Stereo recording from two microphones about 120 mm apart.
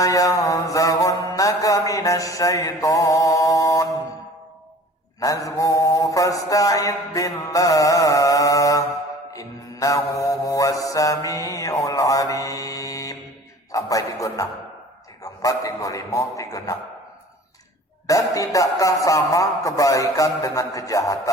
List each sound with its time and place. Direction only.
0.0 s mantra: 30° left (ahead or behind)
5.2 s mantra: 30° left (ahead or behind)
13.7 s a man's voice: 30° left (ahead or behind)
18.0 s a man's voice: 30° left (ahead or behind)